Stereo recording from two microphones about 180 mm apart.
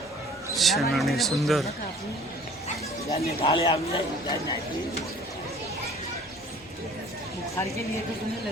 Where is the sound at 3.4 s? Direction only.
30° left (ahead or behind).